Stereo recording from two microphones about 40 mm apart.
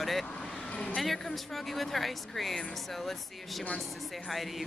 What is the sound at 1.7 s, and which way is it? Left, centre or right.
Speech, centre.